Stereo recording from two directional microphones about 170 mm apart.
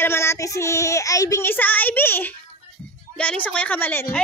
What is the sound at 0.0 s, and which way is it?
A woman's voice, 15° left (ahead or behind).